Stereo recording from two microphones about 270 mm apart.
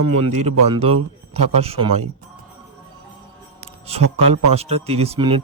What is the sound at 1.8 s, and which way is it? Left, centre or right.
Speech, right.